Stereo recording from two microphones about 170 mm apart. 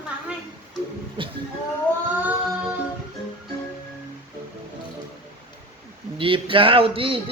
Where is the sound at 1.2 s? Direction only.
30° right (ahead or behind).